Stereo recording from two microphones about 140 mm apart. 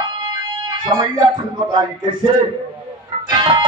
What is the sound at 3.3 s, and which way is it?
Music, 30° right (ahead or behind).